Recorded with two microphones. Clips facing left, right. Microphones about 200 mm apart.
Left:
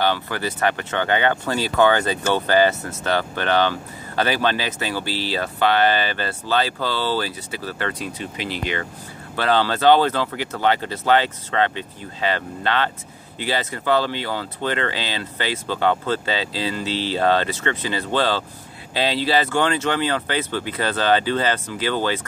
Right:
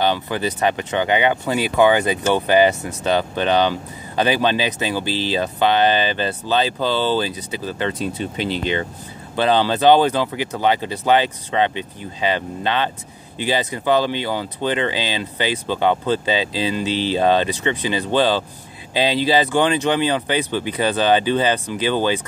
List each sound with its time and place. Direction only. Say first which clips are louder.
0.0 s speech: right 2 dB; 20° right (ahead or behind)
8.2 s speech: right 5 dB; 30° right (ahead or behind)
9.4 s speech: right 3 dB; 15° right (ahead or behind)